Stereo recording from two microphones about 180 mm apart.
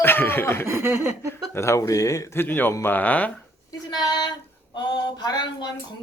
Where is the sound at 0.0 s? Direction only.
10° left (ahead or behind).